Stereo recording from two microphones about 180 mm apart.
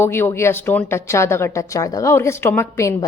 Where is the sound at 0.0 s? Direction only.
15° left (ahead or behind).